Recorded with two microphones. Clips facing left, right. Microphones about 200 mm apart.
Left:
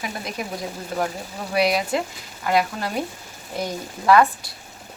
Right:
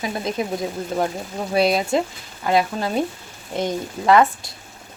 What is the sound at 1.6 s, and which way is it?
Frying, 25° right (ahead or behind).